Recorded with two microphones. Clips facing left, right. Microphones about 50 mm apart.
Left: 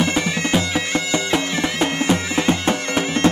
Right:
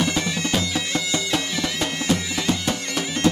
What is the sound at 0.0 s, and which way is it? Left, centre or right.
Bagpipes, left.